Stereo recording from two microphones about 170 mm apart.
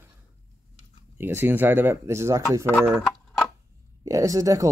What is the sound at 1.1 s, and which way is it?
Speech, 10° right (ahead or behind).